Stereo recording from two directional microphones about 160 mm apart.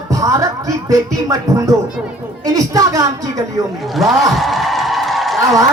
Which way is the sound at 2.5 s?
20° right (ahead or behind).